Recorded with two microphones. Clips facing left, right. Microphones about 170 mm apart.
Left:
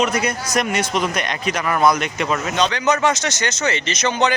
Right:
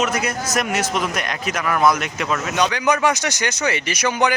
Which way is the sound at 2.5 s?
10° right (ahead or behind).